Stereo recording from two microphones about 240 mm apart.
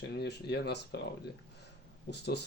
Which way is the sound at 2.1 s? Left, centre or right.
Left.